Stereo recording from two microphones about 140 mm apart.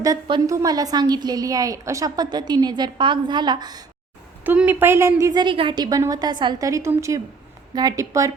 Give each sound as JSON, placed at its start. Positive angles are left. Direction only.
{"t": 0.0, "sound": "a woman's voice", "side_deg": -30}
{"t": 4.4, "sound": "a woman's voice", "side_deg": -15}